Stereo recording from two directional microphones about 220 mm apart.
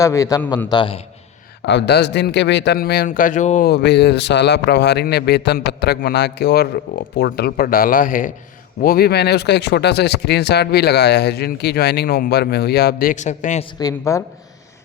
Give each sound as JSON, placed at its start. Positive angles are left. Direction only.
{"t": 0.0, "sound": "a man's voice", "side_deg": 15}
{"t": 0.7, "sound": "a man's voice", "side_deg": 25}
{"t": 1.6, "sound": "speech", "side_deg": 50}
{"t": 3.7, "sound": "speech", "side_deg": 50}
{"t": 13.7, "sound": "a man's voice", "side_deg": 15}